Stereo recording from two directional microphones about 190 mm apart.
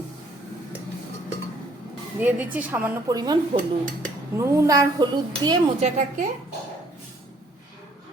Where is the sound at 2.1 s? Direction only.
10° right (ahead or behind).